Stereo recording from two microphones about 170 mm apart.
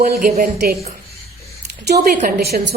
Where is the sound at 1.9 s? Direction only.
65° right (ahead or behind).